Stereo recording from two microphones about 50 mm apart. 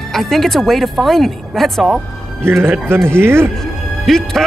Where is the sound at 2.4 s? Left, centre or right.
Right.